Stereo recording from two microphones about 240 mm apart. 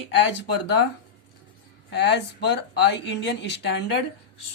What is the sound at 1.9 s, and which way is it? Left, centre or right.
A woman's voice, left.